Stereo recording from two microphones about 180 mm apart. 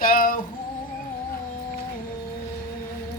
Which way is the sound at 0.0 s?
55° left (ahead or behind).